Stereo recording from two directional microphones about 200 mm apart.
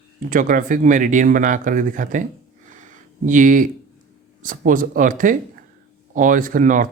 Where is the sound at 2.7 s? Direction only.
40° right (ahead or behind).